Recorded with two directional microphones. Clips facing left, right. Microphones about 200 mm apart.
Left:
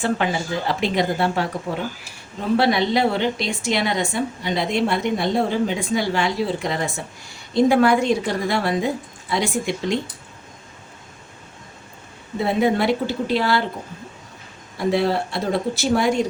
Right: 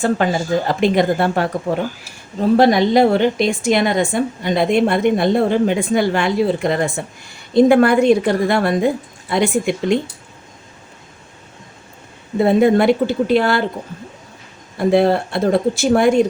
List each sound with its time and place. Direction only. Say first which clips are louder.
0.2 s a woman's voice: right 6 dB; 40° right (ahead or behind)
2.6 s a woman's voice: right 6 dB; 45° right (ahead or behind)
12.4 s a woman's voice: right 7 dB; 50° right (ahead or behind)
14.8 s a woman's voice: right 6 dB; 50° right (ahead or behind)